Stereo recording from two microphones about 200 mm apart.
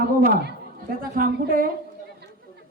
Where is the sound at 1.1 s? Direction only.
45° right (ahead or behind).